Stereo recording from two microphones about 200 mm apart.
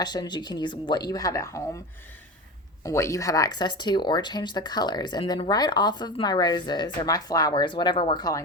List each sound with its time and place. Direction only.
0.0 s speech: 20° left (ahead or behind)
2.8 s speech: 15° left (ahead or behind)